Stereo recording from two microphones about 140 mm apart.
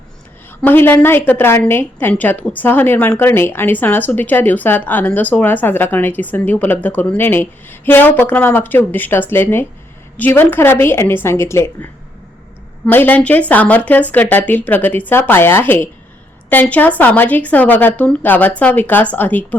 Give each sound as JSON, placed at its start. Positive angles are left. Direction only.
{"t": 0.6, "sound": "a woman's voice", "side_deg": 15}